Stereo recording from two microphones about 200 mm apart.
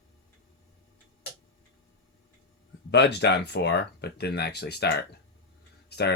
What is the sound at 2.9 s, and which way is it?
Speech, 55° left (ahead or behind).